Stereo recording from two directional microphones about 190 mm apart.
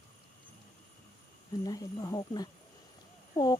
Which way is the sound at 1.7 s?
20° left (ahead or behind).